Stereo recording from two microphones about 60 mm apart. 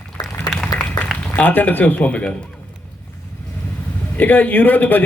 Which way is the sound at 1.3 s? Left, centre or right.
Left.